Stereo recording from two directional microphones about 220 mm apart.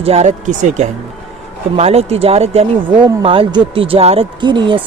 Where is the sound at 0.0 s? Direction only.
30° right (ahead or behind).